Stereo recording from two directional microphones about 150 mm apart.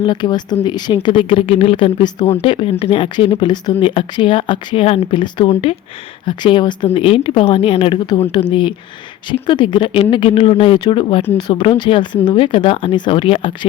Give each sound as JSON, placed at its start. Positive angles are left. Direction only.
{"t": 0.0, "sound": "speech", "side_deg": 30}